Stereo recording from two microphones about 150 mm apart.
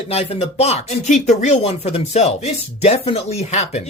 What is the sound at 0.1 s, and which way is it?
Speech, 45° left (ahead or behind).